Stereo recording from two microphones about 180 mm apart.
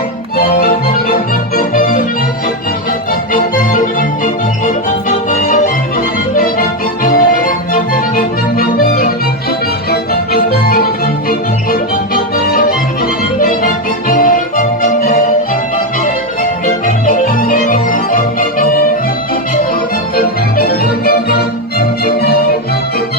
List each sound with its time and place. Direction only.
0.3 s music: 55° left (ahead or behind)
1.1 s organ: 50° left (ahead or behind)
3.1 s organ: 50° left (ahead or behind)
4.6 s music: 45° left (ahead or behind)
14.1 s music: 50° left (ahead or behind)
16.4 s music: 45° left (ahead or behind)
20.1 s organ: 55° left (ahead or behind)